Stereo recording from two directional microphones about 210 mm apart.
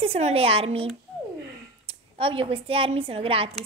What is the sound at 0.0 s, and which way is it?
Speech, 30° right (ahead or behind).